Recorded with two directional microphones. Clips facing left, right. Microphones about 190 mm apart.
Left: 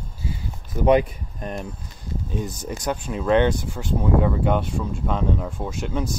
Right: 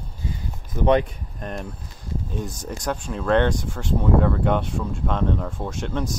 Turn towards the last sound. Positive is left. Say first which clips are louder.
# even
turn(degrees=5)  # may be behind; listen again after turning